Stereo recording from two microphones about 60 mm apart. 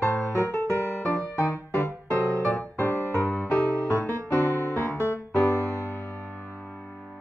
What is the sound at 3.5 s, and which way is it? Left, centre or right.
Music, left.